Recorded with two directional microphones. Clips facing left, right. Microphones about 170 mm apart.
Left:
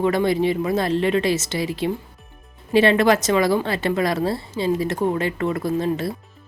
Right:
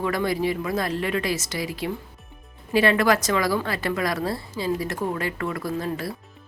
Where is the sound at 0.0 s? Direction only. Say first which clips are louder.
Left 5 dB; 25° left (ahead or behind).